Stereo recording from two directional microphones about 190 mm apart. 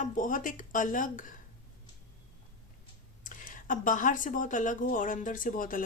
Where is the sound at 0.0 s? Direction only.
45° left (ahead or behind).